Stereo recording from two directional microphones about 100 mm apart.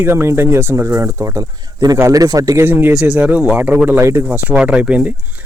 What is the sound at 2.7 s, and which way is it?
Speech, 20° right (ahead or behind).